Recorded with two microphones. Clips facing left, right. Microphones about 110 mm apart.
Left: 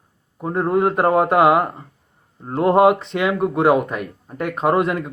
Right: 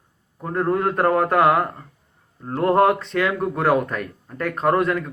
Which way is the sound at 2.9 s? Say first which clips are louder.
Left 2 dB; 25° left (ahead or behind).